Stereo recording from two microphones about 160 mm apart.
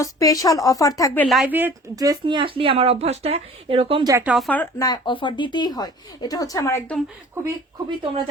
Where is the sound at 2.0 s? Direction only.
25° right (ahead or behind).